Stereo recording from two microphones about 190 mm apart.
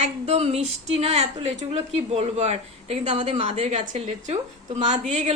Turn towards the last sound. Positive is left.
turn(degrees=-35)  # may be behind; listen again after turning